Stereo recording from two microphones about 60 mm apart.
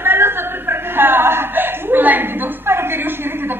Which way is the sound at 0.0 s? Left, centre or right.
Right.